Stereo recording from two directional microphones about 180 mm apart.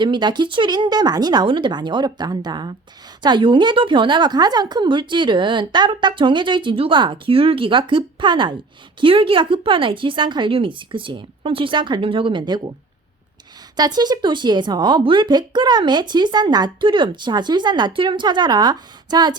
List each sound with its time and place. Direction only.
0.0 s speech: 25° right (ahead or behind)
13.7 s speech: 20° right (ahead or behind)